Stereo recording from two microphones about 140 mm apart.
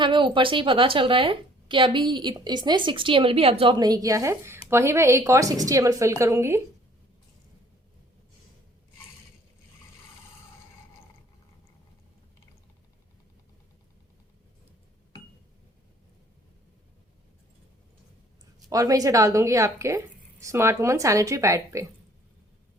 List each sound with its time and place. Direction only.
0.0 s a woman's voice: 35° right (ahead or behind); by 6.6 s 20° right (ahead or behind)
18.7 s a woman's voice: 25° right (ahead or behind)